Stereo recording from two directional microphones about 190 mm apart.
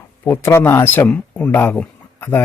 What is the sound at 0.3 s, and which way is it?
Speech, 10° left (ahead or behind).